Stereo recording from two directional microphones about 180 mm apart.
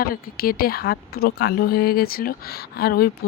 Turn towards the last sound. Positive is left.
turn(degrees=55)  # may be behind; listen again after turning